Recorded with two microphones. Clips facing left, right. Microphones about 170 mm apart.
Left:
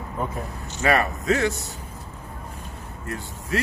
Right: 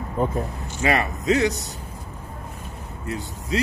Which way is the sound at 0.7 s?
20° right (ahead or behind).